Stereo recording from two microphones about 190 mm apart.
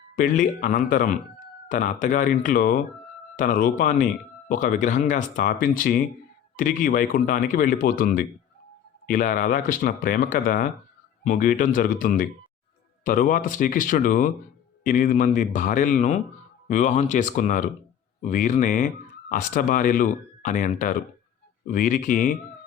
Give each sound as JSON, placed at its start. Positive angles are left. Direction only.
{"t": 0.2, "sound": "speech", "side_deg": 45}